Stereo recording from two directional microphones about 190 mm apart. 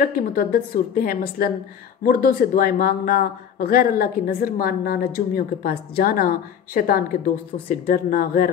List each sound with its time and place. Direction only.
0.0 s speech: 50° left (ahead or behind)